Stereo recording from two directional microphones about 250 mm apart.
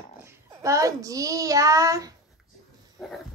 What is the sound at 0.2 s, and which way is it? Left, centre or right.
A child's voice, centre.